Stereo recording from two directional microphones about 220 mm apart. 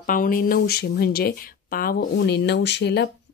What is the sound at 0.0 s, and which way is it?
Speech, 40° left (ahead or behind).